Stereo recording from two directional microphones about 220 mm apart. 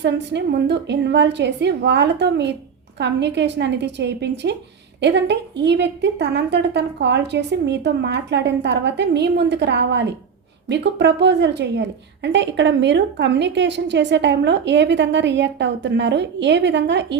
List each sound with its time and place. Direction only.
0.0 s a woman's voice: 50° right (ahead or behind)